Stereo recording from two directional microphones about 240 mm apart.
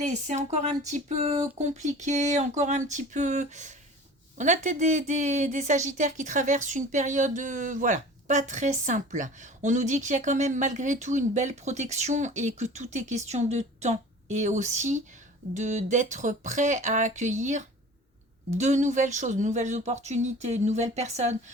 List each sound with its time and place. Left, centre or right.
0.0 s a woman's voice: right